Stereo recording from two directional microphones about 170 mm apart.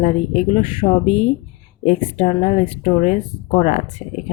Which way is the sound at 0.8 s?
60° left (ahead or behind).